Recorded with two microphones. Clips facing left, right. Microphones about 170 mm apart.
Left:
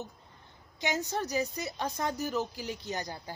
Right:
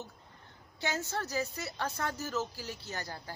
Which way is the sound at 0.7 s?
15° left (ahead or behind).